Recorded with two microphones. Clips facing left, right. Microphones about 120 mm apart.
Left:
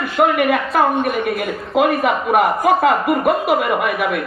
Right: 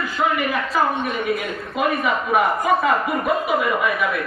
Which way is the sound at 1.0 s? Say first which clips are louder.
Left 4 dB; 65° left (ahead or behind).